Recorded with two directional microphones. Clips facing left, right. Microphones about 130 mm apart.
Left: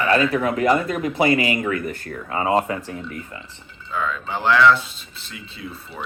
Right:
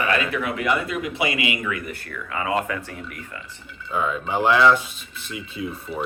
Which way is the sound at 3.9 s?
15° right (ahead or behind).